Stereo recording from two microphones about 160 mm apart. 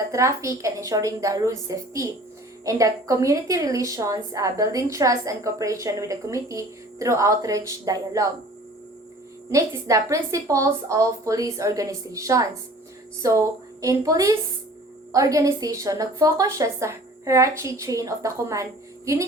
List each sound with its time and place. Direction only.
0.1 s a woman's voice: 20° right (ahead or behind)
9.5 s a woman's voice: 20° right (ahead or behind)